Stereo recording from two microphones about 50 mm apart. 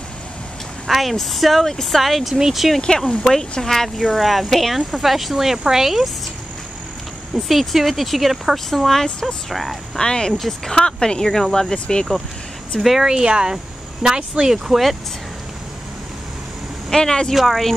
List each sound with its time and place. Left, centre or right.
0.8 s speech: centre
2.8 s speech: centre
7.3 s speech: centre
9.9 s speech: centre
10.3 s speech: centre
10.7 s speech: centre
12.8 s speech: centre
13.1 s speech: centre
16.9 s speech: centre